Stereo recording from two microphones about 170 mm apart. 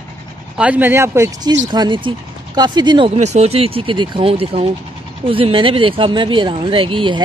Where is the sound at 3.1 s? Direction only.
40° right (ahead or behind).